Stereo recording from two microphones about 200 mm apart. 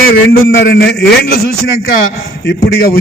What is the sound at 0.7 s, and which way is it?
Speech, 50° left (ahead or behind).